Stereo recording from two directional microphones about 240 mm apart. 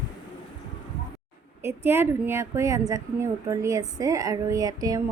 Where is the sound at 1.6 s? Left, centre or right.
Centre.